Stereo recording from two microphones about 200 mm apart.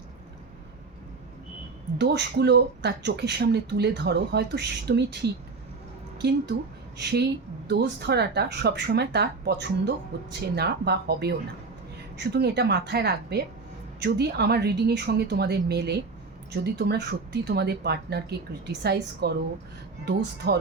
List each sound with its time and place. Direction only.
2.0 s speech: 55° right (ahead or behind)
6.9 s speech: 55° right (ahead or behind)